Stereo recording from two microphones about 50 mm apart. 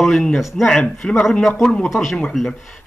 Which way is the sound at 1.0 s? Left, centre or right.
Centre.